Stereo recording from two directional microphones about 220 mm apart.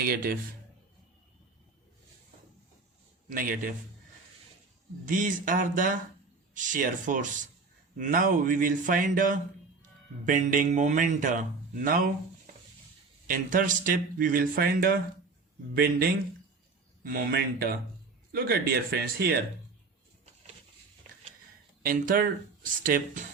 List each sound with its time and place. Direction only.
0.0 s speech: 40° right (ahead or behind)
3.2 s speech: 40° right (ahead or behind)
5.0 s speech: 35° right (ahead or behind)
13.2 s speech: 40° right (ahead or behind)
21.8 s speech: 40° right (ahead or behind)